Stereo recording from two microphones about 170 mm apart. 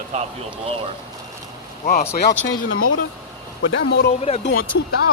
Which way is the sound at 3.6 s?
90° left.